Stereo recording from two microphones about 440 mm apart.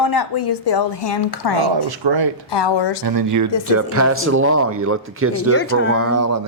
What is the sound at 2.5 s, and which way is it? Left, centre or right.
Speech, left.